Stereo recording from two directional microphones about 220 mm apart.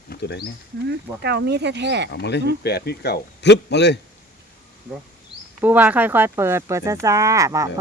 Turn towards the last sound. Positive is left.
turn(degrees=-15)  # may be behind; listen again after turning